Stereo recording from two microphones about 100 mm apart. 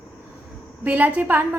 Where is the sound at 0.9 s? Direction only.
15° right (ahead or behind).